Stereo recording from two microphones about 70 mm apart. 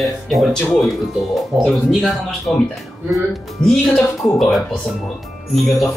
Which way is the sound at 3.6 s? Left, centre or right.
Centre.